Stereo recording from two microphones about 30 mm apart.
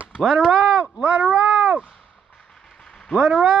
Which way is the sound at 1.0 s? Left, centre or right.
Right.